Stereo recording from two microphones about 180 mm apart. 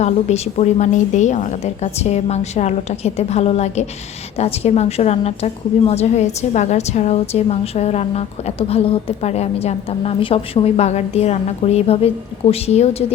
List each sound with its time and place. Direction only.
0.0 s a woman's voice: 40° left (ahead or behind)